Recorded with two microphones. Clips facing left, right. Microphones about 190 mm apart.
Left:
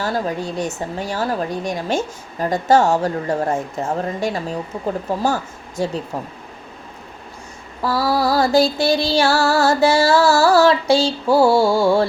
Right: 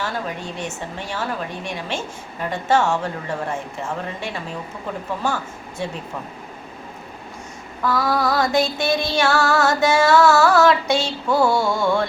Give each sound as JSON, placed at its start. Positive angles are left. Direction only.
{"t": 0.0, "sound": "a woman's voice", "side_deg": 35}
{"t": 7.8, "sound": "a woman's voice", "side_deg": 30}